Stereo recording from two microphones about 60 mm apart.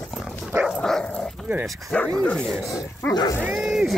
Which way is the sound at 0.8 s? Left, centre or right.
Centre.